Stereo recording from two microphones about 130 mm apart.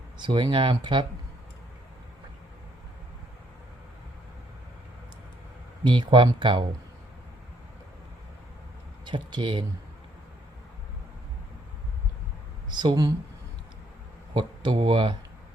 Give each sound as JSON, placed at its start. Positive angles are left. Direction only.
{"t": 0.2, "sound": "speech", "side_deg": -35}
{"t": 5.8, "sound": "speech", "side_deg": -35}
{"t": 9.0, "sound": "speech", "side_deg": -35}
{"t": 12.7, "sound": "speech", "side_deg": -35}
{"t": 14.3, "sound": "speech", "side_deg": -40}